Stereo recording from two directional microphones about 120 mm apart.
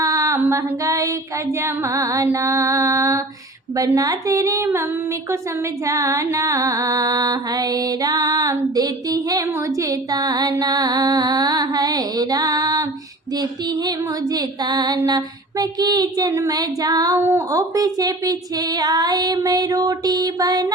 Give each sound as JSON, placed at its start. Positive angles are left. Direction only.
{"t": 0.0, "sound": "a sound", "side_deg": -25}
{"t": 5.8, "sound": "music", "side_deg": -25}
{"t": 17.2, "sound": "speech", "side_deg": -20}
{"t": 17.5, "sound": "music", "side_deg": -30}